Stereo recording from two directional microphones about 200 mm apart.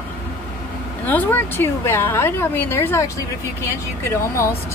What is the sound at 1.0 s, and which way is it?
A woman's voice, 10° left (ahead or behind).